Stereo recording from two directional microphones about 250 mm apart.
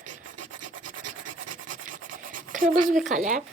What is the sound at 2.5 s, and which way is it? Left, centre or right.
Writing, right.